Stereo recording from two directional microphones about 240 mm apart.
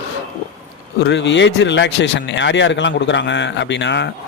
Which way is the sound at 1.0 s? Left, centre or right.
Left.